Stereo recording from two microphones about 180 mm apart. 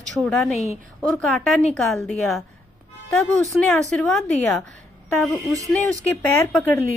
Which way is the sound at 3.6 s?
5° left (ahead or behind).